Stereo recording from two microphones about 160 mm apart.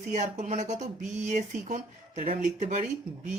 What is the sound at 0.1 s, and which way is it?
Speech, 50° right (ahead or behind).